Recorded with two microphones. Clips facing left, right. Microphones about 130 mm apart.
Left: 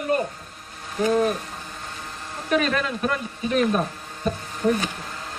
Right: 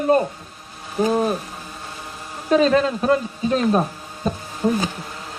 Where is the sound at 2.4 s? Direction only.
30° right (ahead or behind).